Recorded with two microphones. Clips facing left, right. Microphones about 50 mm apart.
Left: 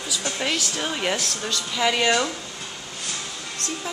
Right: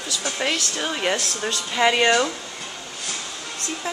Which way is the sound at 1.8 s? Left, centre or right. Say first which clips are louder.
Right 3 dB; centre.